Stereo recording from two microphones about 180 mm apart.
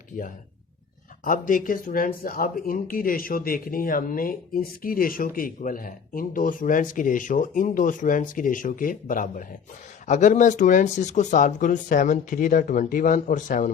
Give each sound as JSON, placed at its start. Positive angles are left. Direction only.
{"t": 1.2, "sound": "speech", "side_deg": 50}